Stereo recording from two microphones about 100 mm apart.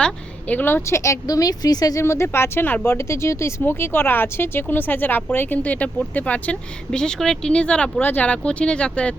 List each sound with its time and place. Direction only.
0.0 s a woman's voice: 15° left (ahead or behind); by 2.0 s 40° left (ahead or behind)
2.0 s speech: 25° left (ahead or behind); by 9.1 s 10° left (ahead or behind)